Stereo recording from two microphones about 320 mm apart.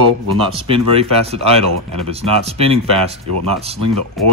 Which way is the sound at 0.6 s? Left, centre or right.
Centre.